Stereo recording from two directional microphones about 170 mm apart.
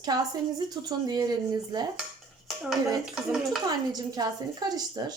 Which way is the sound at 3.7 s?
25° right (ahead or behind).